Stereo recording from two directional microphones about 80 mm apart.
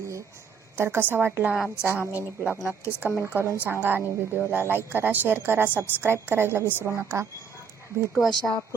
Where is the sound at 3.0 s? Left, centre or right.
Right.